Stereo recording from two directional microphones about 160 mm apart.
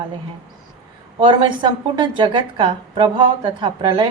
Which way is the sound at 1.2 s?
30° right (ahead or behind).